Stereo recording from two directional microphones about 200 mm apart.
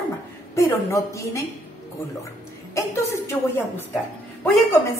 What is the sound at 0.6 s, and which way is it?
Speech, 15° left (ahead or behind).